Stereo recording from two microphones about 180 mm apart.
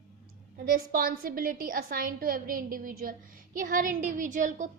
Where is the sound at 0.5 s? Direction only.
55° right (ahead or behind).